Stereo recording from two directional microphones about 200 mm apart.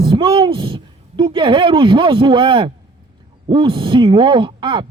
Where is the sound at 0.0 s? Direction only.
25° right (ahead or behind).